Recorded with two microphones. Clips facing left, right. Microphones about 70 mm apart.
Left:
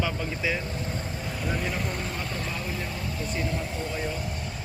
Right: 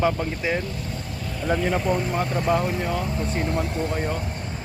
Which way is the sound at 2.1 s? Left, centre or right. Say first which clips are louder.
Right 11 dB; right.